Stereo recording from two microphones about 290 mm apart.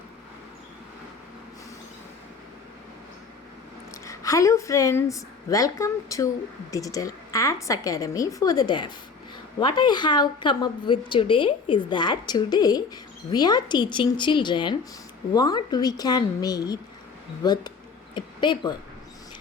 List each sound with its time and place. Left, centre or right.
4.0 s a woman's voice: centre